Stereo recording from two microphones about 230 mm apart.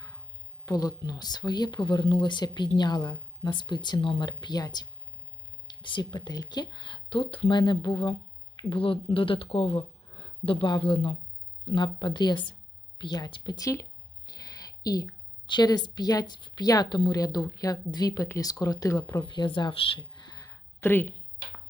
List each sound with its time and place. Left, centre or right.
0.6 s a woman's voice: centre